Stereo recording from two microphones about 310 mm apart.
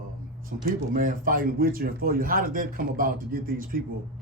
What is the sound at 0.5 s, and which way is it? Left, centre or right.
Speech, right.